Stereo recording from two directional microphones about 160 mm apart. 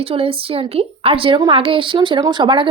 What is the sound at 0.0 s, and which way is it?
A woman's voice, 35° right (ahead or behind).